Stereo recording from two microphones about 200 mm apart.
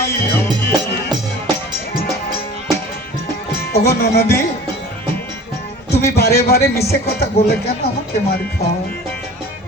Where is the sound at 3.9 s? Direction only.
50° left (ahead or behind).